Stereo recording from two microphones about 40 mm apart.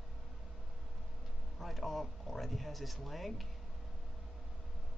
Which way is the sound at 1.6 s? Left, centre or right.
Centre.